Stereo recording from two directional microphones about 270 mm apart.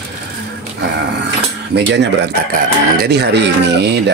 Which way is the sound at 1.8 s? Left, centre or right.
Right.